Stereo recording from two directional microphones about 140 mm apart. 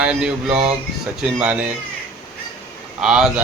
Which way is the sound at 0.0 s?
5° right (ahead or behind).